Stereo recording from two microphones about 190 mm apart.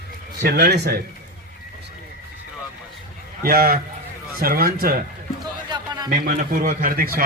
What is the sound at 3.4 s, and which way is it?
A man's voice, 50° right (ahead or behind).